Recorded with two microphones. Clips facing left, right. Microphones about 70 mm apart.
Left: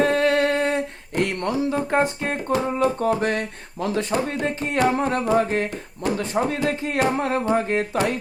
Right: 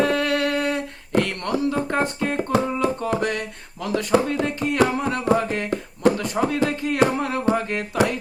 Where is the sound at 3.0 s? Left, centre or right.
Left.